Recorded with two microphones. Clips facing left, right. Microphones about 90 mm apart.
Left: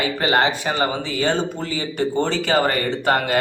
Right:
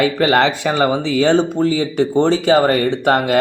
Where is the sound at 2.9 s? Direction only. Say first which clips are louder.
Right 5 dB; 50° right (ahead or behind).